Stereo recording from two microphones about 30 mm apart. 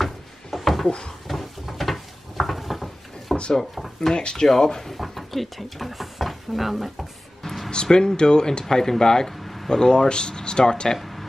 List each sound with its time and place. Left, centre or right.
0.0 s a sound: centre
3.7 s speech: centre
4.1 s speech: left
4.9 s speech: centre
7.4 s music: centre
7.7 s speech: left
8.6 s speech: centre
9.4 s a sound: centre
9.7 s speech: left